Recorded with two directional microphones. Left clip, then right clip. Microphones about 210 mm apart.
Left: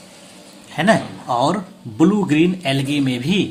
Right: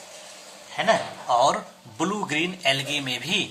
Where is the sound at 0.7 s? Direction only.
30° left (ahead or behind).